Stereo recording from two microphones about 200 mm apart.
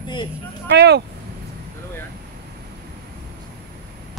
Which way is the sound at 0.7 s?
60° right (ahead or behind).